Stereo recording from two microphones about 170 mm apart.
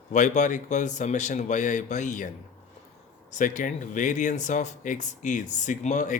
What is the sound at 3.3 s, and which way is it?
Speech, 50° left (ahead or behind).